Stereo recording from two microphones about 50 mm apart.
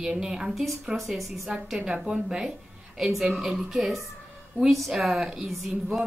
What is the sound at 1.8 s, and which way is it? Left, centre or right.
Speech, centre.